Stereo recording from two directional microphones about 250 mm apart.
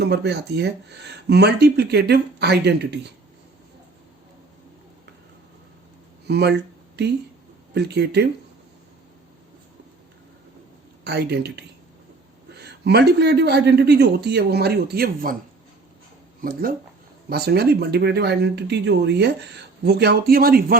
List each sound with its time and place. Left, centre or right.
0.0 s speech: right
6.2 s speech: right
7.7 s speech: right
11.0 s speech: right
16.4 s speech: right